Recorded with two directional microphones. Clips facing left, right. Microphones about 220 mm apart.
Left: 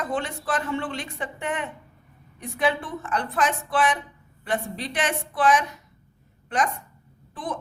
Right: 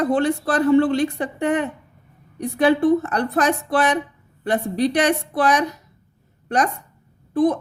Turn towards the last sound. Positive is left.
turn(degrees=-40)  # may be behind; listen again after turning